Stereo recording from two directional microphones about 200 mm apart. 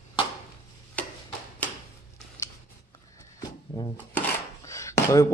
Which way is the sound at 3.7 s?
20° left (ahead or behind).